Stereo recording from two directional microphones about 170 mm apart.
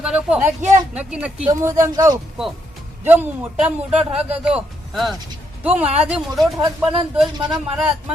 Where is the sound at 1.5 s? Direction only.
20° right (ahead or behind).